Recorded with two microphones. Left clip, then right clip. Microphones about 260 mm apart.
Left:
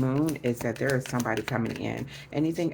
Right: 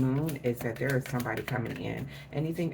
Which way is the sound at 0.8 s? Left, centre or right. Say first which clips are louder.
Left 4 dB; left.